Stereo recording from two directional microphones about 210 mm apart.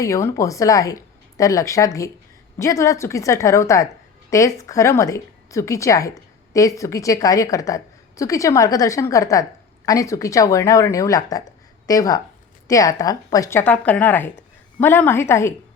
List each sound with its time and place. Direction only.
0.0 s a woman's voice: 15° left (ahead or behind)